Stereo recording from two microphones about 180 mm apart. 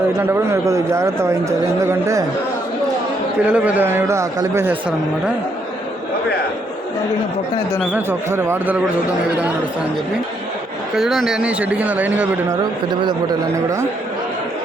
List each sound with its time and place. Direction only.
0.2 s a man's voice: 10° right (ahead or behind)
3.5 s a man's voice: 10° right (ahead or behind)
7.9 s a man's voice: 15° right (ahead or behind)
10.9 s a man's voice: centre (ahead or behind)
12.9 s speech: 25° right (ahead or behind)